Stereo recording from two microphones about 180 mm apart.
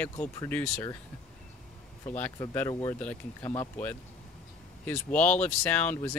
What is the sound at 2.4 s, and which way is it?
Speech, 20° left (ahead or behind).